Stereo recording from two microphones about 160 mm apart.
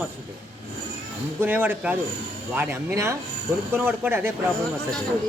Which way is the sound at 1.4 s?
15° right (ahead or behind).